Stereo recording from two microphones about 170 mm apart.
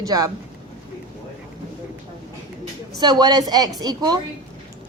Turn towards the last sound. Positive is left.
turn(degrees=-25)  # may be behind; listen again after turning